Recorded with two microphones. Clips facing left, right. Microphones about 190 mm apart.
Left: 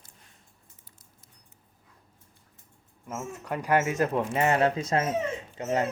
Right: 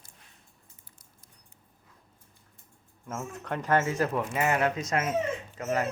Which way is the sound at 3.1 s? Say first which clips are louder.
Left 1 dB; 5° left (ahead or behind).